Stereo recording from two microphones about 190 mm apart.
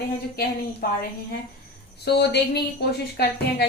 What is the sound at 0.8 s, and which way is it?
Speech, 55° left (ahead or behind).